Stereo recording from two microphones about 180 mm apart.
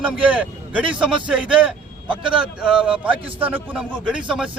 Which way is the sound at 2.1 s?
25° right (ahead or behind).